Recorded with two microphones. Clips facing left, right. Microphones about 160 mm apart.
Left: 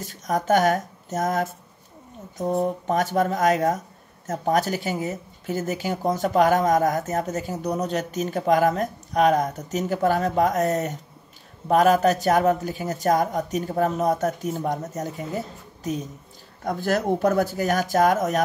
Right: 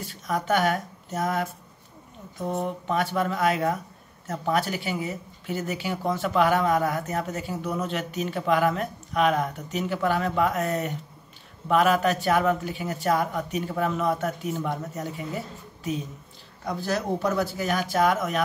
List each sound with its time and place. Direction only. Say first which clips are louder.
0.0 s speech: left 3 dB; 45° left (ahead or behind)